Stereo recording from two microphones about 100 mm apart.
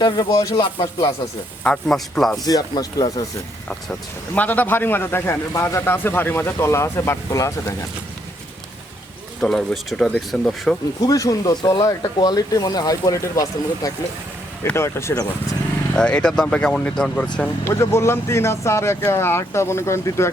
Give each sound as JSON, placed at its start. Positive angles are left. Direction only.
{"t": 0.0, "sound": "speech", "side_deg": 45}
{"t": 1.6, "sound": "speech", "side_deg": 5}
{"t": 2.4, "sound": "speech", "side_deg": 40}
{"t": 4.4, "sound": "speech", "side_deg": 15}
{"t": 9.4, "sound": "speech", "side_deg": 5}
{"t": 11.0, "sound": "speech", "side_deg": 35}
{"t": 16.0, "sound": "speech", "side_deg": 10}
{"t": 17.7, "sound": "speech", "side_deg": 25}